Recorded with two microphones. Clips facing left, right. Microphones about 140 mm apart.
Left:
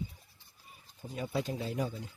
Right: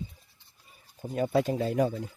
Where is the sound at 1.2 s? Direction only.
60° right (ahead or behind).